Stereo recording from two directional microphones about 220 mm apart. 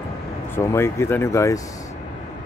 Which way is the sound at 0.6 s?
10° left (ahead or behind).